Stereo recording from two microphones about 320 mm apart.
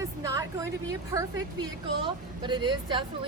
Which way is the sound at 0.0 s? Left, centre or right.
Centre.